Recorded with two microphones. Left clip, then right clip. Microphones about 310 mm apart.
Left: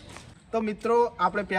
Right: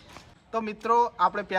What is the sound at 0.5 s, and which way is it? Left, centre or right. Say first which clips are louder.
Speech: even; centre.